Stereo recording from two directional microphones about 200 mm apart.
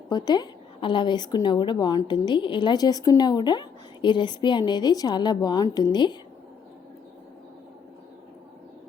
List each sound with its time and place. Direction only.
0.1 s a woman's voice: 20° left (ahead or behind)